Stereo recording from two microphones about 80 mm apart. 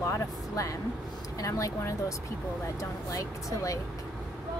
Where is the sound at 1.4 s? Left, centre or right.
Left.